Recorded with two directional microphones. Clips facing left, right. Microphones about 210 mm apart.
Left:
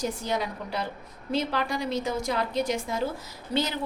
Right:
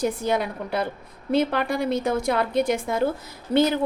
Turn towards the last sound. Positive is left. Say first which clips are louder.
# right 8 dB
turn(degrees=-55)  # may be behind; listen again after turning